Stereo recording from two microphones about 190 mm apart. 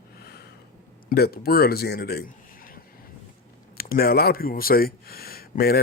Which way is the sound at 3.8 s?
50° left (ahead or behind).